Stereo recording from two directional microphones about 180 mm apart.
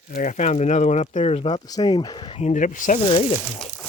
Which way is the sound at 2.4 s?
45° left (ahead or behind).